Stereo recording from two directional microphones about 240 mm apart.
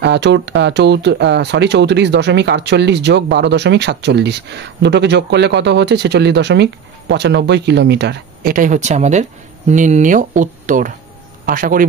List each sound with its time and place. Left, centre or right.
0.0 s speech: right